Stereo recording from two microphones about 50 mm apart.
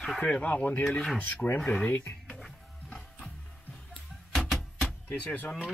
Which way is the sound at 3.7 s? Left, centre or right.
Centre.